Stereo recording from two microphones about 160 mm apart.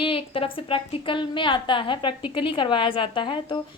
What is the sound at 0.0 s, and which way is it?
A woman's voice, 35° left (ahead or behind).